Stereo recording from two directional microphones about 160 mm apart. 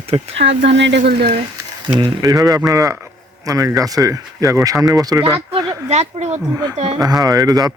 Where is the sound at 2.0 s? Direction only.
25° right (ahead or behind).